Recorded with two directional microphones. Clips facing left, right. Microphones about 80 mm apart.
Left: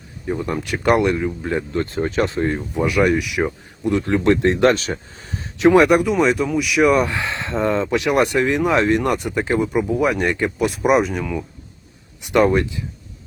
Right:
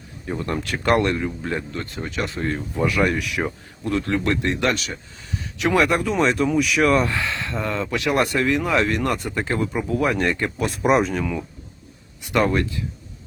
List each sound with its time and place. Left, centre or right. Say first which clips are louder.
0.3 s speech: left 3 dB; centre
0.9 s speech: left 3 dB; centre
1.7 s speech: left 8 dB; left
5.5 s speech: left 7 dB; left
6.1 s speech: left 2 dB; centre
6.8 s speech: left 3 dB; centre
12.2 s speech: left 4 dB; centre